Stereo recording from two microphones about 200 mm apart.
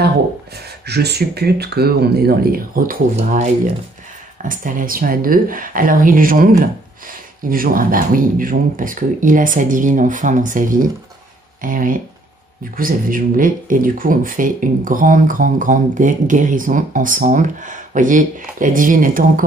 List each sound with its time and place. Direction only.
0.8 s speech: 55° right (ahead or behind)